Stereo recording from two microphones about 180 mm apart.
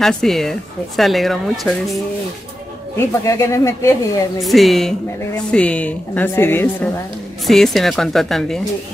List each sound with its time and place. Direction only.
0.0 s speech: centre (ahead or behind)
3.3 s a woman's voice: 15° left (ahead or behind)
4.4 s a woman's voice: centre (ahead or behind)